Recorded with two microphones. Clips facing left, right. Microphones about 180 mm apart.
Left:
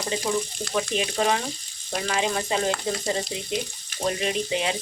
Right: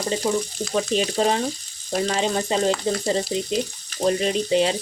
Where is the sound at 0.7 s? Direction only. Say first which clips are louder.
Right 4 dB; 35° right (ahead or behind).